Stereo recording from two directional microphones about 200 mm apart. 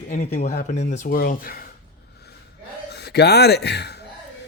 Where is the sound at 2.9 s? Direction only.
55° left (ahead or behind).